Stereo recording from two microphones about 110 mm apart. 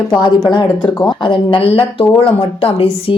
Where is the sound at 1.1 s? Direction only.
50° left (ahead or behind).